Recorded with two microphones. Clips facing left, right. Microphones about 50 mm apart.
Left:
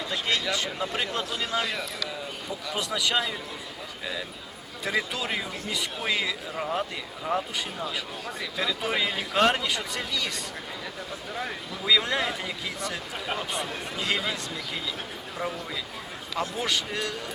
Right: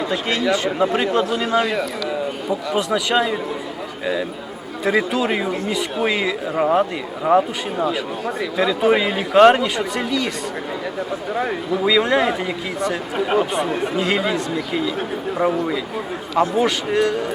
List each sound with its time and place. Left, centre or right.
0.1 s speech: right
4.9 s speech: right
6.6 s speech: right
7.9 s speech: right
11.9 s speech: right
15.4 s speech: right
16.4 s speech: right